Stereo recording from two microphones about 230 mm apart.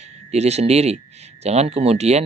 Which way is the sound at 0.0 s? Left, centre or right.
Right.